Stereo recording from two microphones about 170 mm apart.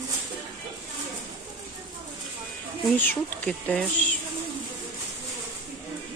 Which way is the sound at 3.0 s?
10° left (ahead or behind).